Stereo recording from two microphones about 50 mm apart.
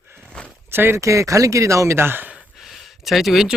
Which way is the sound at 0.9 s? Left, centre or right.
Right.